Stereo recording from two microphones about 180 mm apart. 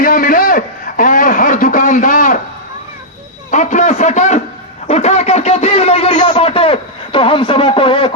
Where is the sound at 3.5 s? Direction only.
45° left (ahead or behind).